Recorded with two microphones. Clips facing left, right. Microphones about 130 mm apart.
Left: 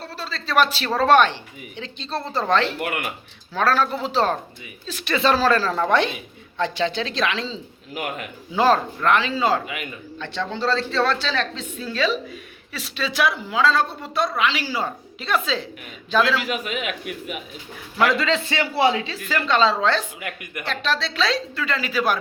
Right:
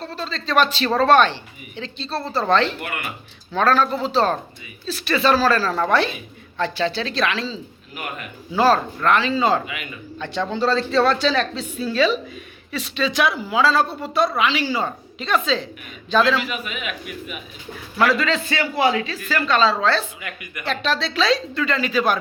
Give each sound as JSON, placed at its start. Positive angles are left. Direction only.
{"t": 0.0, "sound": "a man's voice", "side_deg": 10}
{"t": 10.2, "sound": "a woman's voice", "side_deg": -10}
{"t": 16.5, "sound": "a man's voice", "side_deg": 85}
{"t": 17.9, "sound": "a man's voice", "side_deg": 20}
{"t": 20.2, "sound": "speech", "side_deg": 50}
{"t": 20.7, "sound": "a woman's voice", "side_deg": 0}